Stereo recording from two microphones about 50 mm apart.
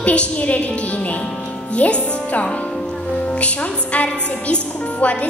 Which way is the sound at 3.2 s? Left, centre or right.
Left.